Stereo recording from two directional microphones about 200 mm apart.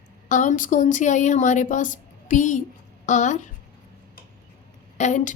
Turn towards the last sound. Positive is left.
turn(degrees=35)  # may be behind; listen again after turning